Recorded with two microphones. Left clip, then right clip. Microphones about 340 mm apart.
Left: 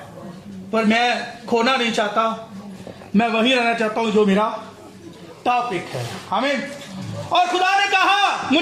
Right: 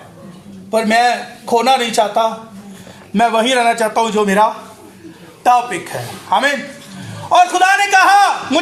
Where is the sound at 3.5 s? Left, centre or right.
Centre.